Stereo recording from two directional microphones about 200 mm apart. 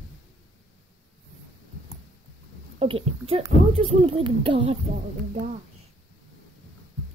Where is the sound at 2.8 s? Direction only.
30° right (ahead or behind).